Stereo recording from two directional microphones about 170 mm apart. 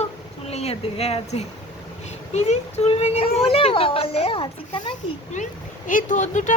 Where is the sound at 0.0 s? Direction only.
40° left (ahead or behind).